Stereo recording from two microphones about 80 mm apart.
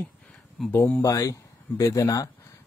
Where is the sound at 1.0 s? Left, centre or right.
Left.